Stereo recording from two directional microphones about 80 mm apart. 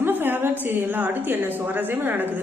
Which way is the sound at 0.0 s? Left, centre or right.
Right.